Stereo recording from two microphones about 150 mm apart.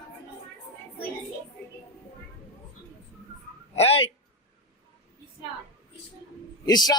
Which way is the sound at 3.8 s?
40° left (ahead or behind).